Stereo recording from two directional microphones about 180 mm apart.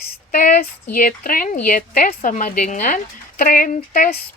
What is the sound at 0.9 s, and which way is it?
A woman's voice, 50° left (ahead or behind).